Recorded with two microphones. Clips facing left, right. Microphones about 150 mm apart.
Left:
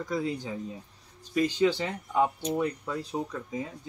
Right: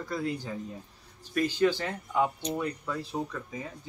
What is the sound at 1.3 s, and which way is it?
Speech, 20° left (ahead or behind).